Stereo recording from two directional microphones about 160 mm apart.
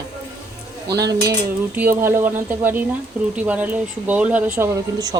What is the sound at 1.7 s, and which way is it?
Speech, 15° right (ahead or behind).